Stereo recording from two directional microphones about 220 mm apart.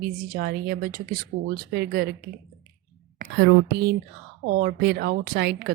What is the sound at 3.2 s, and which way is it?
A woman's voice, 45° right (ahead or behind).